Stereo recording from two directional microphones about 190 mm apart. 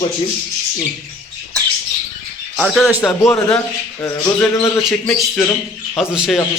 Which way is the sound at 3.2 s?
10° left (ahead or behind).